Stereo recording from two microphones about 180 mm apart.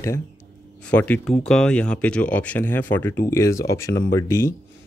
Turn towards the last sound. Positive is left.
turn(degrees=15)  # may be behind; listen again after turning